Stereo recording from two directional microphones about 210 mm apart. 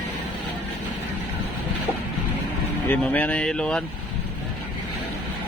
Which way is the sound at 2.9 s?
5° left (ahead or behind).